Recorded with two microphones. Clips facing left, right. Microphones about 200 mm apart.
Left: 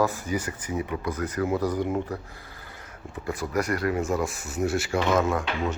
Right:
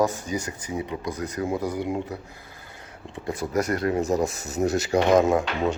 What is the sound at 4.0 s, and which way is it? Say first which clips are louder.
Speech: right 3 dB; 40° right (ahead or behind).